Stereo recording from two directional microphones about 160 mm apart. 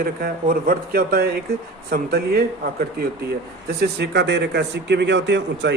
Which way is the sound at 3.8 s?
90° right.